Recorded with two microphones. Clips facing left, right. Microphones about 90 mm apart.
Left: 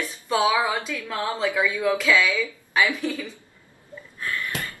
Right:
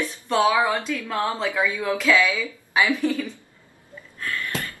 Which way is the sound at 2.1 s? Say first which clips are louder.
Right 1 dB; 15° right (ahead or behind).